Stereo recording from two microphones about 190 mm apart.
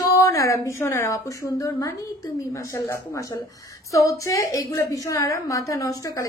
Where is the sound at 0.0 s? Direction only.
20° left (ahead or behind).